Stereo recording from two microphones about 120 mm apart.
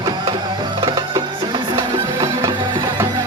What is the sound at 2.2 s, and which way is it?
Music, 25° right (ahead or behind).